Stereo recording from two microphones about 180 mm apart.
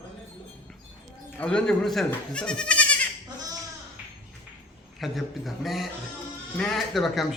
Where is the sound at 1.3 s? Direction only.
5° left (ahead or behind).